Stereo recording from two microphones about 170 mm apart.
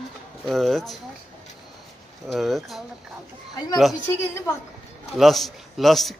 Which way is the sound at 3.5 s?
20° left (ahead or behind).